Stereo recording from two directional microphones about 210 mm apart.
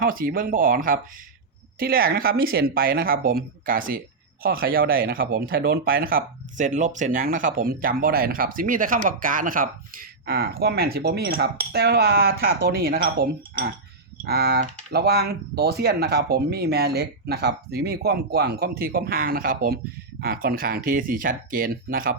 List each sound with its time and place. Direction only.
0.0 s speech: 45° right (ahead or behind)